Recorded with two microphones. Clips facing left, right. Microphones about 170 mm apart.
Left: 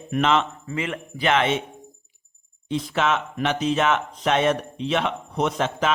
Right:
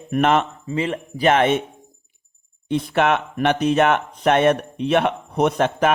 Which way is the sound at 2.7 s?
60° right (ahead or behind).